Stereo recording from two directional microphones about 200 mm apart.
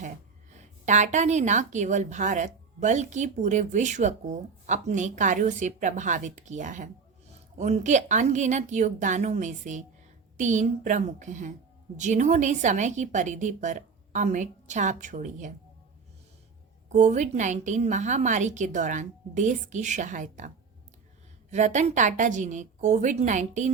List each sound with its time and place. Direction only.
0.9 s a woman's voice: 35° right (ahead or behind)
16.9 s a woman's voice: 35° right (ahead or behind)
21.5 s a woman's voice: 35° right (ahead or behind)